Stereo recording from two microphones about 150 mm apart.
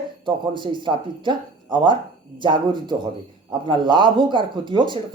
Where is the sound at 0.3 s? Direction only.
30° right (ahead or behind).